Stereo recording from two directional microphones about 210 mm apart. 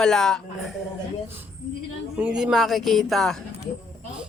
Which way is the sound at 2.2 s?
5° right (ahead or behind).